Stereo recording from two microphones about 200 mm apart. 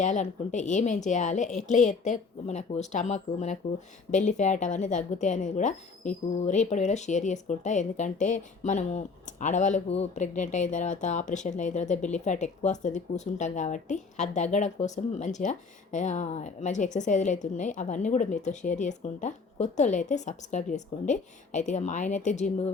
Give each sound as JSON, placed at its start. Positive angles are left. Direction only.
{"t": 0.0, "sound": "speech", "side_deg": 35}